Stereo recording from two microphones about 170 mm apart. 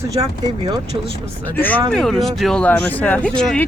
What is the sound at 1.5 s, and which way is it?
Speech, 10° left (ahead or behind).